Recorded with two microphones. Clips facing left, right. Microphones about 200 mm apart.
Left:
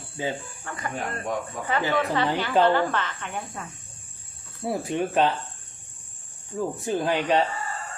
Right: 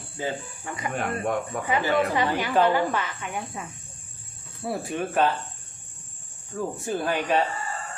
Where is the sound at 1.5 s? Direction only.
60° right (ahead or behind).